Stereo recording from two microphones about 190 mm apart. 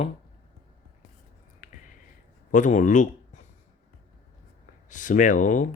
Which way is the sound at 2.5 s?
40° left (ahead or behind).